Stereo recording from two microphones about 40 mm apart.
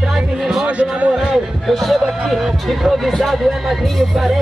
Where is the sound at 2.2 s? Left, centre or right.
Centre.